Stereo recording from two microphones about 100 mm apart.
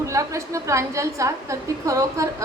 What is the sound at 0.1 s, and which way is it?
A woman's voice, 30° right (ahead or behind).